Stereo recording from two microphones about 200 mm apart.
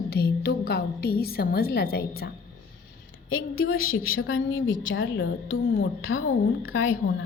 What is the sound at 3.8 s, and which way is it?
Speech, 45° left (ahead or behind).